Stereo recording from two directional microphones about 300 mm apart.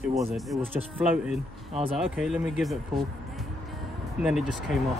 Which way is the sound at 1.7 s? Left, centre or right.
Centre.